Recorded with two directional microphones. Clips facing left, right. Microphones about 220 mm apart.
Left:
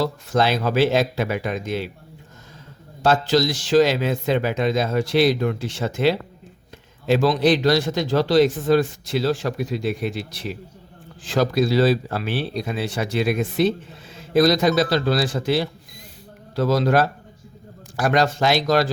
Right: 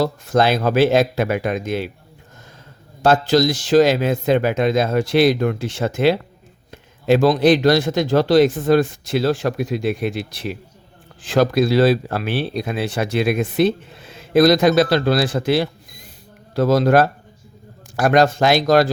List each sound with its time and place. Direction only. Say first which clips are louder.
0.0 s speech: right 3 dB; 50° right (ahead or behind)
3.0 s speech: right 3 dB; 50° right (ahead or behind)